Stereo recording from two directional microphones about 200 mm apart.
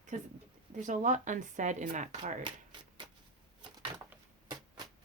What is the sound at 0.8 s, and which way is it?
Speech, 35° right (ahead or behind).